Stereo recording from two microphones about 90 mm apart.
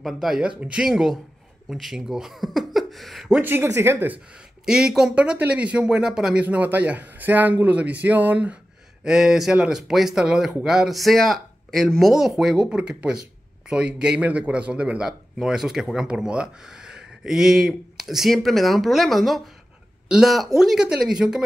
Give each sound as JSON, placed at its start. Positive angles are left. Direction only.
{"t": 0.0, "sound": "speech", "side_deg": -5}
{"t": 3.3, "sound": "speech", "side_deg": -20}
{"t": 4.6, "sound": "speech", "side_deg": -5}
{"t": 9.0, "sound": "speech", "side_deg": -5}